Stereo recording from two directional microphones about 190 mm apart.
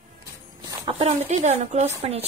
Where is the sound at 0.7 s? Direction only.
25° right (ahead or behind).